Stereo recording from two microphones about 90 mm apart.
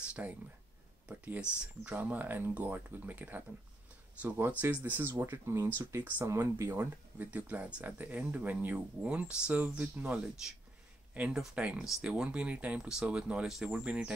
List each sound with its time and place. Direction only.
0.1 s speech: 15° right (ahead or behind); by 6.7 s 35° right (ahead or behind)
6.7 s speech: 20° right (ahead or behind)